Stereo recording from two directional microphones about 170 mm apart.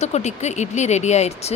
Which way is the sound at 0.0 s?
40° left (ahead or behind).